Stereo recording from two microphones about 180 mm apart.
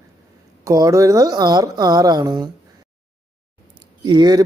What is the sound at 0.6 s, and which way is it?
Speech, 20° right (ahead or behind).